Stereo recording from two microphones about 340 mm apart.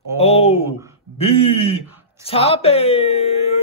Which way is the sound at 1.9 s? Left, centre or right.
Centre.